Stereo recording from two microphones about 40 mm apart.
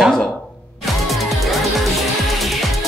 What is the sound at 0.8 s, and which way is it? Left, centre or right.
Music, centre.